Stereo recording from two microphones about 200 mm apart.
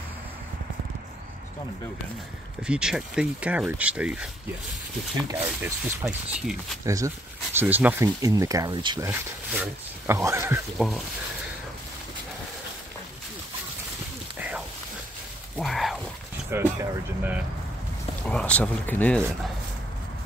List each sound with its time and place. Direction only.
2.6 s speech: 5° right (ahead or behind)
5.3 s speech: 10° right (ahead or behind)
15.5 s a sound: centre (ahead or behind)
16.4 s speech: 10° right (ahead or behind)
18.3 s speech: 5° left (ahead or behind)